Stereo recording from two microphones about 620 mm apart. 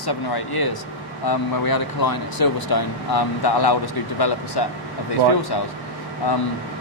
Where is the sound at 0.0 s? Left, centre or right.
Left.